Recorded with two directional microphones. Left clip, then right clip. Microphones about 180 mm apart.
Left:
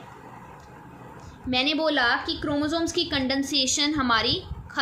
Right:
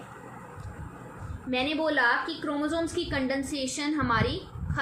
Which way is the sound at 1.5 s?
70° left (ahead or behind).